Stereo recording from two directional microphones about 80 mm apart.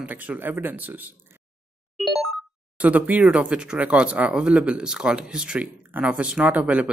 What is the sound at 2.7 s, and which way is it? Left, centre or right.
Speech, centre.